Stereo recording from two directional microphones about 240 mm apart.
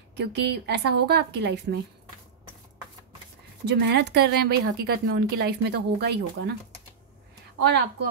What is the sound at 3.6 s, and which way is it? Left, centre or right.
Speech, right.